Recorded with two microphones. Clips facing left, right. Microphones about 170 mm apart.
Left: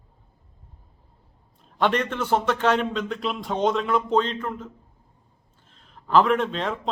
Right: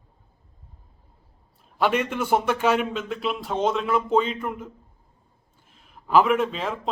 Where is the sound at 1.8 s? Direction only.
5° right (ahead or behind).